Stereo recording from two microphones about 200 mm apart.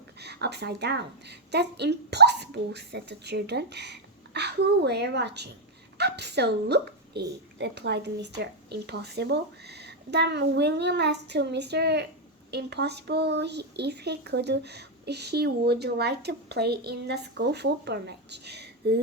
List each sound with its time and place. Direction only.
0.2 s speech: 55° right (ahead or behind)